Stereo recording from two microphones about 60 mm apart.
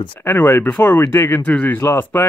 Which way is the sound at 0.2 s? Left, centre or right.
Left.